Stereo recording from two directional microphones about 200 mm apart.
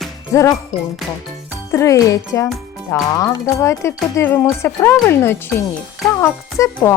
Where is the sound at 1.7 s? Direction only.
15° left (ahead or behind).